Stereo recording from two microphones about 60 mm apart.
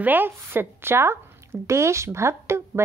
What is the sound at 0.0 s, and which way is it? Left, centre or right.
Speech, right.